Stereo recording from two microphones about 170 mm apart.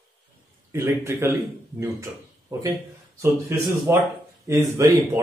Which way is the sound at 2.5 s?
20° right (ahead or behind).